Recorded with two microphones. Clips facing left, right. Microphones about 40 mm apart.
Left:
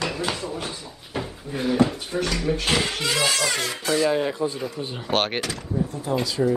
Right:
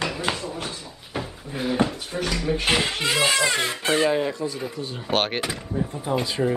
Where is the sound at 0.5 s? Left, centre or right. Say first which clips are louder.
Left 1 dB; centre.